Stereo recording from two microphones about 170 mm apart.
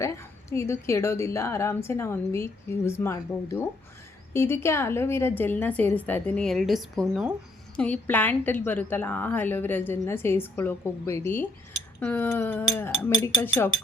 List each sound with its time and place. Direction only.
0.0 s a woman's voice: 15° left (ahead or behind)